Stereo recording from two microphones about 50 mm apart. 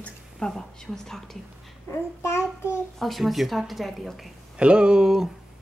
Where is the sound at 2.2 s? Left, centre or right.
Left.